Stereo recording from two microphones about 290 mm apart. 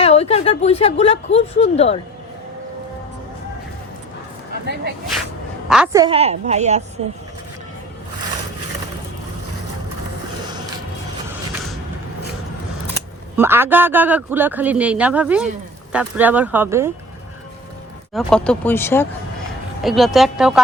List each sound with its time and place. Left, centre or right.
0.0 s speech: left
4.6 s speech: right
5.6 s a woman's voice: centre; by 6.8 s right
13.3 s a man's voice: centre
18.1 s a man's voice: centre